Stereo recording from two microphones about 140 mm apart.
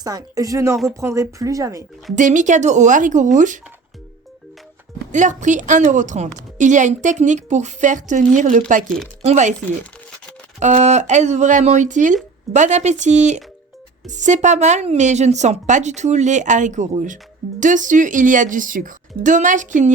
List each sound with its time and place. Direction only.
0.0 s speech: 25° right (ahead or behind)
2.1 s a woman's voice: 65° right (ahead or behind)
5.1 s a woman's voice: 60° right (ahead or behind)
10.6 s a woman's voice: 55° right (ahead or behind)